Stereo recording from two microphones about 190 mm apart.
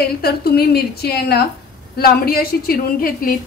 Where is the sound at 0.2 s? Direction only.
55° left (ahead or behind).